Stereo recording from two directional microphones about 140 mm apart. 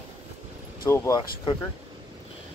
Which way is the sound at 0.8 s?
15° left (ahead or behind).